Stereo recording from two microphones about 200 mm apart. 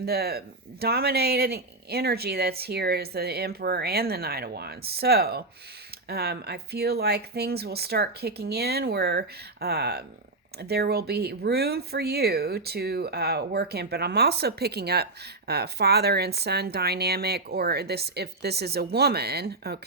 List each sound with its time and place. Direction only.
0.0 s speech: 50° right (ahead or behind)